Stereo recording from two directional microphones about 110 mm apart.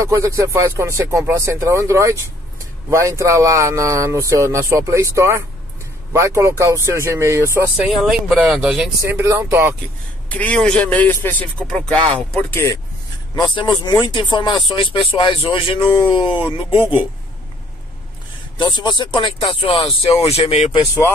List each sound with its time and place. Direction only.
0.0 s speech: 30° right (ahead or behind)
7.8 s speech: 5° right (ahead or behind)
9.5 s speech: 20° right (ahead or behind)
10.3 s speech: 10° left (ahead or behind)
13.6 s speech: 45° left (ahead or behind)
18.6 s speech: 45° left (ahead or behind)